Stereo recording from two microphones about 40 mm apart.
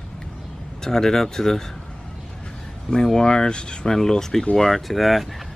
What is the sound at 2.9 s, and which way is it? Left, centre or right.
Speech, centre.